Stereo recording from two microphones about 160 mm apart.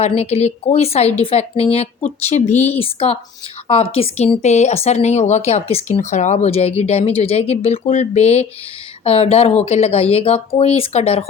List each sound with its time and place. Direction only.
0.0 s speech: 40° left (ahead or behind)